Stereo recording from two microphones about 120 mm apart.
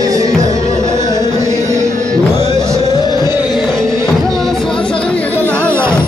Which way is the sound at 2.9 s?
35° left (ahead or behind).